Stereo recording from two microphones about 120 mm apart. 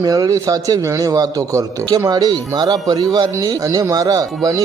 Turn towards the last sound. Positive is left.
turn(degrees=-30)  # may be behind; listen again after turning